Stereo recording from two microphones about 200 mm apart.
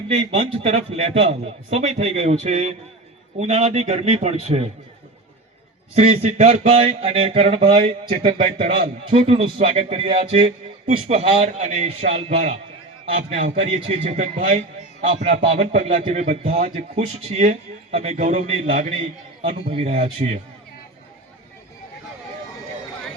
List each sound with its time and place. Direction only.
0.1 s a man's voice: 30° right (ahead or behind)
5.9 s a man's voice: 35° right (ahead or behind)